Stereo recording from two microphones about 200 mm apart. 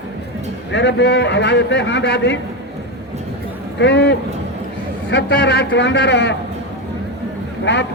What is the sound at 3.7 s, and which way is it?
A man's voice, 60° left (ahead or behind).